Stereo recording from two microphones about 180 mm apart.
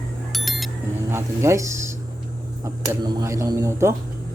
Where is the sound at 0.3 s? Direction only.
Centre (ahead or behind).